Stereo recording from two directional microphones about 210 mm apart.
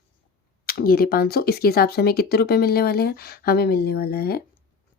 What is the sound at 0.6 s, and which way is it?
Speech, 45° left (ahead or behind).